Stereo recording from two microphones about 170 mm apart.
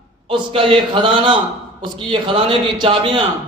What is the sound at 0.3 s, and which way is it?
A man's voice, 30° right (ahead or behind).